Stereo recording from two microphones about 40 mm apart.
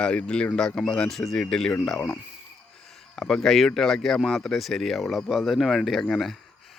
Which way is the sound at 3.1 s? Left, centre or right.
Centre.